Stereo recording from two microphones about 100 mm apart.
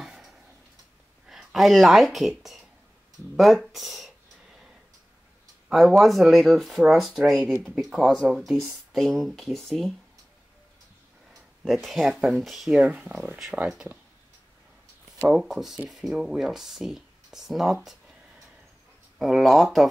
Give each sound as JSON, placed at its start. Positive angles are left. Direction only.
{"t": 0.0, "sound": "tick-tock", "side_deg": -5}
{"t": 1.2, "sound": "speech", "side_deg": -5}
{"t": 5.7, "sound": "speech", "side_deg": 0}
{"t": 11.6, "sound": "speech", "side_deg": 0}
{"t": 12.8, "sound": "speech", "side_deg": -10}
{"t": 15.2, "sound": "speech", "side_deg": -5}
{"t": 19.1, "sound": "speech", "side_deg": 0}